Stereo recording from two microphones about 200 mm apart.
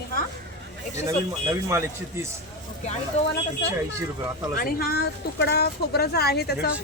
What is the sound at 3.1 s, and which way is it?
Speech, 30° left (ahead or behind).